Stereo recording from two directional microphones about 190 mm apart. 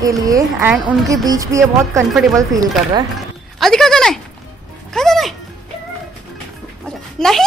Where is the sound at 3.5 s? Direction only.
Centre (ahead or behind).